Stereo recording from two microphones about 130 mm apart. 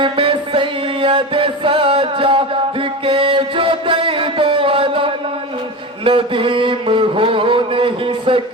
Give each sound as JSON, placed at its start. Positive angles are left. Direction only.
{"t": 0.0, "sound": "music", "side_deg": -40}
{"t": 3.1, "sound": "mantra", "side_deg": -40}